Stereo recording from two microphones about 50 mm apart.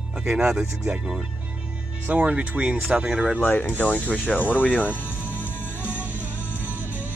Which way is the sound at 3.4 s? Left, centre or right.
Left.